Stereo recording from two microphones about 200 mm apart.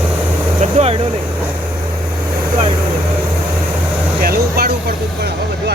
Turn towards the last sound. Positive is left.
turn(degrees=-50)  # may be behind; listen again after turning